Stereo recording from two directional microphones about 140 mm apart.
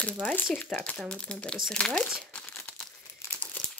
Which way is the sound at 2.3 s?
10° left (ahead or behind).